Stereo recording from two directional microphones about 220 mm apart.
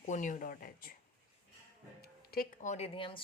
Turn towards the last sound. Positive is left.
turn(degrees=25)  # may be behind; listen again after turning